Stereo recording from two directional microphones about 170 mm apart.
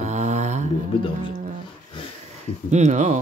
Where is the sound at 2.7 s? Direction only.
40° right (ahead or behind).